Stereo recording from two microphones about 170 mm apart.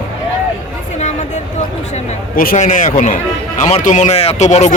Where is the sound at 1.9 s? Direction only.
50° left (ahead or behind).